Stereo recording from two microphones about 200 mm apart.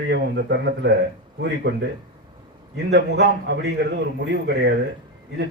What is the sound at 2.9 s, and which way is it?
A man's voice, 60° right (ahead or behind).